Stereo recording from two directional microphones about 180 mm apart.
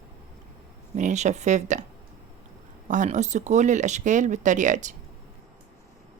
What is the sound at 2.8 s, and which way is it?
Speech, 45° right (ahead or behind).